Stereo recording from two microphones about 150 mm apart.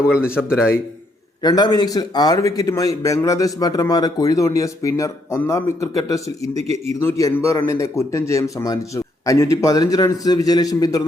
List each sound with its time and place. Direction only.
0.3 s speech: 5° right (ahead or behind)
1.4 s a man's voice: 25° left (ahead or behind)
6.6 s a man's voice: 45° right (ahead or behind)
7.0 s a man's voice: 20° left (ahead or behind)